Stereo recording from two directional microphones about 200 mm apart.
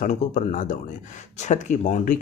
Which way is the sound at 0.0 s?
40° left (ahead or behind).